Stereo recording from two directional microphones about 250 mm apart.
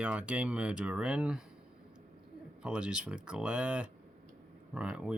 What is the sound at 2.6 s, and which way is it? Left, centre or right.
Speech, centre.